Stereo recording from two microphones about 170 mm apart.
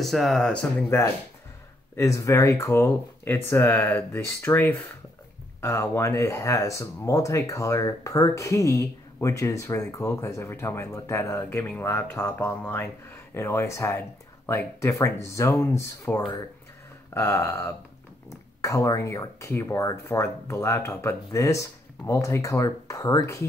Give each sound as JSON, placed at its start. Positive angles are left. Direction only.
{"t": 0.0, "sound": "speech", "side_deg": 0}